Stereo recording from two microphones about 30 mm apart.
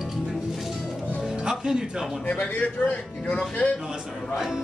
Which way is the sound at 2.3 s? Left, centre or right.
Left.